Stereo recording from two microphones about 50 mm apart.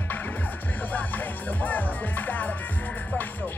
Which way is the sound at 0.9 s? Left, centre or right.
Left.